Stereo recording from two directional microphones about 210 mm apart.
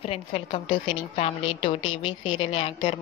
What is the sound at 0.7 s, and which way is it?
Speech, 65° left (ahead or behind).